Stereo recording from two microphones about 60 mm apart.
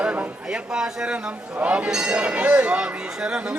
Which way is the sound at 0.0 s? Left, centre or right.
Right.